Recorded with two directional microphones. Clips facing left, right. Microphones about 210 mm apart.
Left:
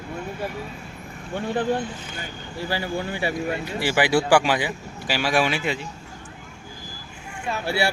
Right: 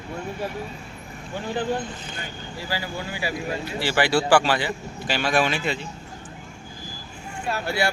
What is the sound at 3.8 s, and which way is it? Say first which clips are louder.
Speech: left 1 dB; 15° left (ahead or behind).